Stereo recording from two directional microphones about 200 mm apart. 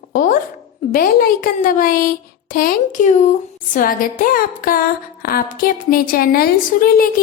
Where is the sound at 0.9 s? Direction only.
45° left (ahead or behind).